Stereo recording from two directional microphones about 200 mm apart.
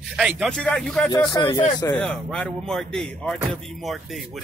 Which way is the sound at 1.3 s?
25° left (ahead or behind).